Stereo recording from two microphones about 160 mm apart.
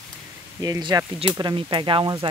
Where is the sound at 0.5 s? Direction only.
25° right (ahead or behind).